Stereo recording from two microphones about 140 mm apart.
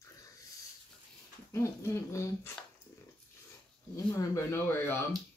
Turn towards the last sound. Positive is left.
turn(degrees=15)  # may be behind; listen again after turning